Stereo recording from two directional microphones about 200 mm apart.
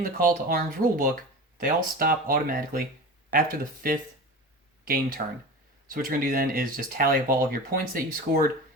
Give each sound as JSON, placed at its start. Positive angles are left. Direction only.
{"t": 0.0, "sound": "speech", "side_deg": -45}